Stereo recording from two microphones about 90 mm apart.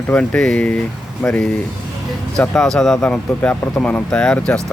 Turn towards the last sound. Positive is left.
turn(degrees=10)  # may be behind; listen again after turning